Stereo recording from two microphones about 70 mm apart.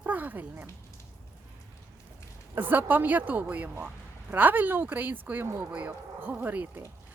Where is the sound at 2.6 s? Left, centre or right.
Right.